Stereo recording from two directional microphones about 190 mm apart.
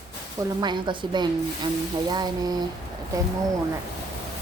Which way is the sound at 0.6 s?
25° right (ahead or behind).